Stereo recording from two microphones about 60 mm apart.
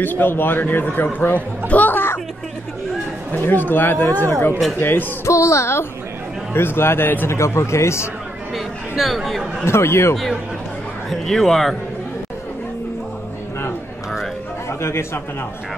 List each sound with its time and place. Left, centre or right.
0.0 s a man's voice: left
1.7 s music: left
3.3 s a man's voice: left
5.2 s speech: left
6.5 s a man's voice: left
7.3 s speech: left
8.5 s a sound: centre
9.7 s speech: left
11.1 s a man's voice: centre
14.7 s a man's voice: left